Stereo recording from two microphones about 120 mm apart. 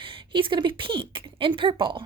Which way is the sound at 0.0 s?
45° right (ahead or behind).